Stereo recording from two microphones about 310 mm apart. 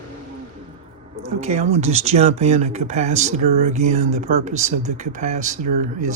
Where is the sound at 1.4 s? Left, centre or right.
Right.